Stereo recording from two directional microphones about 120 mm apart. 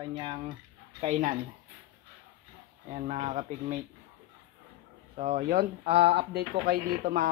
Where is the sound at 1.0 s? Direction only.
90° right.